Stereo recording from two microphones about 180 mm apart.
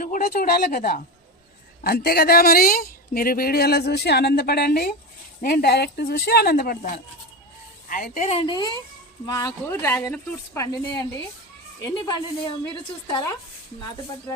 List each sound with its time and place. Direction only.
0.0 s a woman's voice: 50° left (ahead or behind); by 13.3 s 25° left (ahead or behind)